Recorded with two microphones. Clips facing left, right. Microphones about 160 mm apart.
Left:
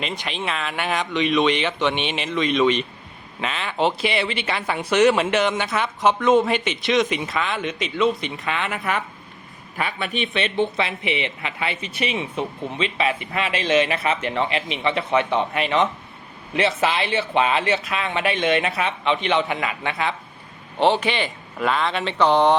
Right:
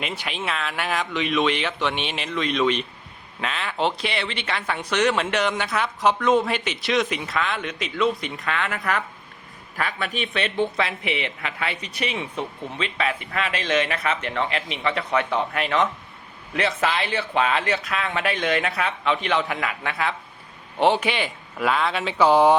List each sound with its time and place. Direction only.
0.0 s speech: 5° right (ahead or behind)
8.4 s speech: 15° left (ahead or behind)
10.1 s speech: centre (ahead or behind)
14.0 s speech: 30° left (ahead or behind)
14.9 s speech: centre (ahead or behind)
20.7 s a man's voice: 10° right (ahead or behind)